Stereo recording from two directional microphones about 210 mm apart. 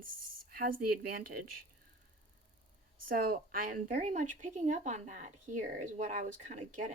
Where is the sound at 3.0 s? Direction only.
40° right (ahead or behind).